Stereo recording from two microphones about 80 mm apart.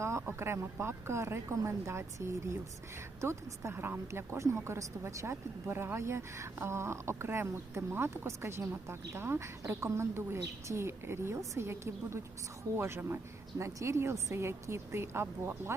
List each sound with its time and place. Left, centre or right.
0.0 s a woman's voice: right